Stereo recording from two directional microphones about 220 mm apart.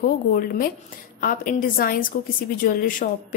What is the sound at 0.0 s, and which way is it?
Speech, 40° left (ahead or behind).